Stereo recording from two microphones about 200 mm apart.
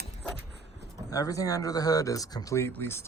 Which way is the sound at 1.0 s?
15° left (ahead or behind).